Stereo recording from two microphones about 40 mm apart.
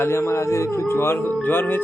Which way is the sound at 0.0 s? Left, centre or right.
Left.